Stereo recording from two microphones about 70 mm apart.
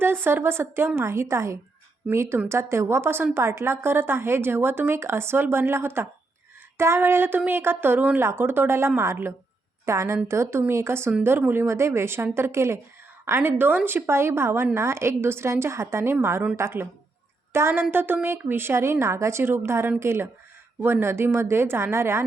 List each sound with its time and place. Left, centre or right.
0.0 s a woman's voice: right